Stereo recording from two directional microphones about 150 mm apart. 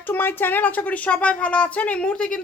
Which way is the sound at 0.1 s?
15° left (ahead or behind).